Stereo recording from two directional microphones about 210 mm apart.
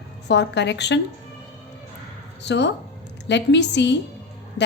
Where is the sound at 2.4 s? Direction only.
55° left (ahead or behind).